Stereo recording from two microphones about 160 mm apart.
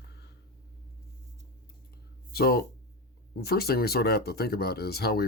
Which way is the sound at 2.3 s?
80° left.